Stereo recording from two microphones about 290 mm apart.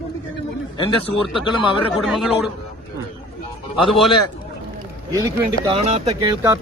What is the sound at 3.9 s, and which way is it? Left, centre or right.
Speech, centre.